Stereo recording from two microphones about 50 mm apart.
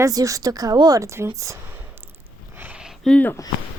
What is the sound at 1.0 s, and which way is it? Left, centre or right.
Speech, right.